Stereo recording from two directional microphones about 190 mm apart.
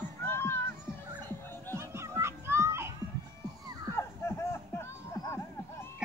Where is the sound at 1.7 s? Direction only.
15° right (ahead or behind).